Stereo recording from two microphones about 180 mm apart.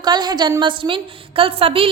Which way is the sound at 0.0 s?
25° right (ahead or behind).